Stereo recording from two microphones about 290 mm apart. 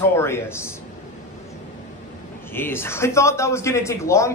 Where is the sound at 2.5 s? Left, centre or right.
Centre.